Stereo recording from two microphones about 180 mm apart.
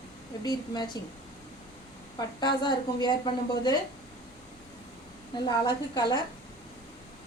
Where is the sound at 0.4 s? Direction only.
25° left (ahead or behind).